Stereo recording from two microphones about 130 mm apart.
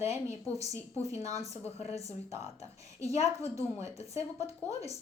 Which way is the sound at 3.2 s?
25° right (ahead or behind).